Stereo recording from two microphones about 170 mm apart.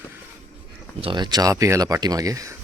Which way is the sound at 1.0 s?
25° right (ahead or behind).